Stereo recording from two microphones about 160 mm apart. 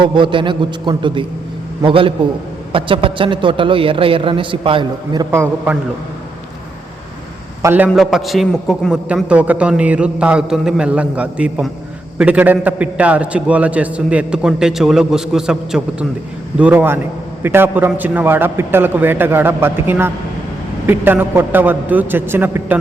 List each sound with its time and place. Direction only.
0.0 s a man's voice: 30° right (ahead or behind)
5.3 s a man's voice: 15° right (ahead or behind)
7.6 s a man's voice: 10° right (ahead or behind)
7.9 s a man's voice: centre (ahead or behind)